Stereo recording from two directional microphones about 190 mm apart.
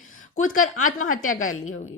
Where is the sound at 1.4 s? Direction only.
90° left.